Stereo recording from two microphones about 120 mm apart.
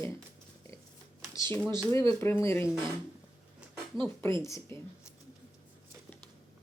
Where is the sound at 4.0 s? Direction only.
40° right (ahead or behind).